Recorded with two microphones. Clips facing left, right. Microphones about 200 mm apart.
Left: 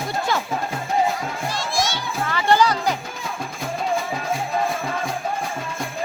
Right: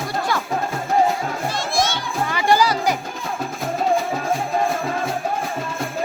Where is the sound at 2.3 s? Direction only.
10° right (ahead or behind).